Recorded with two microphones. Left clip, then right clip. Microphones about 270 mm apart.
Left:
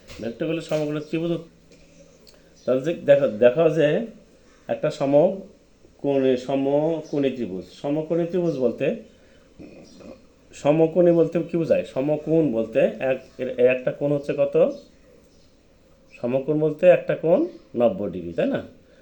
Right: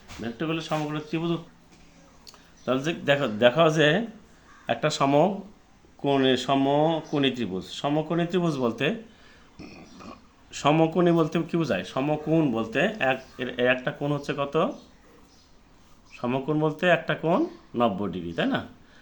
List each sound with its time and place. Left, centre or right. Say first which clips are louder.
0.2 s speech: left 3 dB; centre
2.6 s speech: left 6 dB; centre
10.6 s speech: left 4 dB; centre
16.2 s speech: left 4 dB; centre